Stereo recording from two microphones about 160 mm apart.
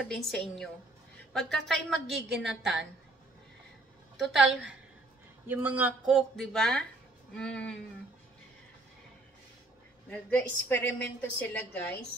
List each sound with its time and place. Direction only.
0.0 s a woman's voice: centre (ahead or behind)
4.2 s a woman's voice: centre (ahead or behind)
6.0 s a woman's voice: centre (ahead or behind)
10.0 s a woman's voice: 10° left (ahead or behind)